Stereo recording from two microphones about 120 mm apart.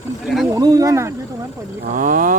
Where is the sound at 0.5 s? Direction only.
30° right (ahead or behind).